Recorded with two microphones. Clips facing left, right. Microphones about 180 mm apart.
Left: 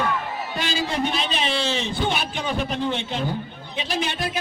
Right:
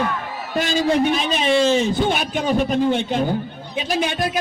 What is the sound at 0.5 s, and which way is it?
Speech, 45° right (ahead or behind).